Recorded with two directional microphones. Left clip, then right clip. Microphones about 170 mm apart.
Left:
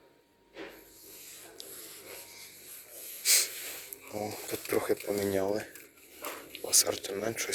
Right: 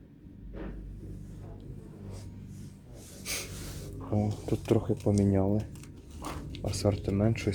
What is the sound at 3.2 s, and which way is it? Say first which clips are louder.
Snort: left 10 dB; 10° right (ahead or behind).